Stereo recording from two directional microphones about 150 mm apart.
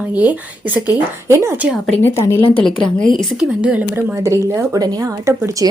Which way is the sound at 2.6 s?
5° left (ahead or behind).